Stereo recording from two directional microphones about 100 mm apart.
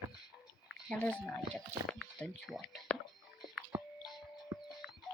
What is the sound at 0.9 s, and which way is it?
Speech, 15° left (ahead or behind).